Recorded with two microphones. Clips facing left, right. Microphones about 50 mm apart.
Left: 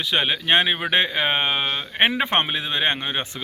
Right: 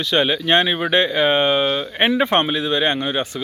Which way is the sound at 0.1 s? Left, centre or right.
Centre.